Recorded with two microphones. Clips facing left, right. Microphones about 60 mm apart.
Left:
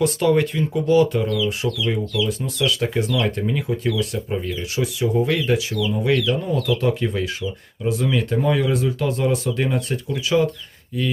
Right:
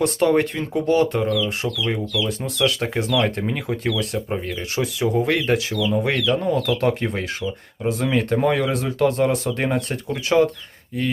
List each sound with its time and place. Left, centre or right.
0.0 s speech: right
2.4 s speech: right